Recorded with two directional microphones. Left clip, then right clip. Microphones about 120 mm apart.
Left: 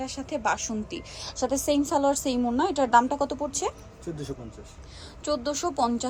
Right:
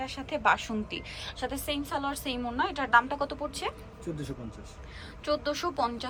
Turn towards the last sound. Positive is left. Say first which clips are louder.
# left 4 dB
turn(degrees=35)  # may be behind; listen again after turning